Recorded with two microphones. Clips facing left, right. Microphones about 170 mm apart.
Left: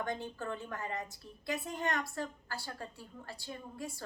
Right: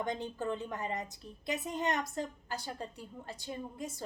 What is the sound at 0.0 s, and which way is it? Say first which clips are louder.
A woman's voice: right 3 dB; 20° right (ahead or behind).